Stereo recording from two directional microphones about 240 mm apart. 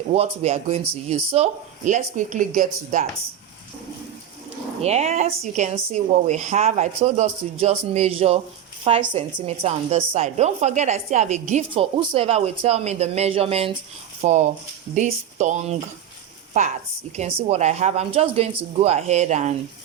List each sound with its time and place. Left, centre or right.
0.1 s a woman's voice: right
4.8 s a woman's voice: right
17.2 s a woman's voice: right